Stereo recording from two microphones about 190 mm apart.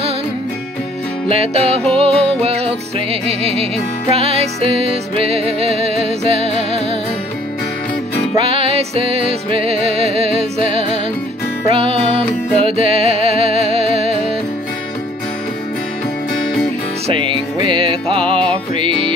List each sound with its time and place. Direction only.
1.3 s music: 30° right (ahead or behind)
8.4 s music: 30° right (ahead or behind)
17.1 s music: 25° right (ahead or behind)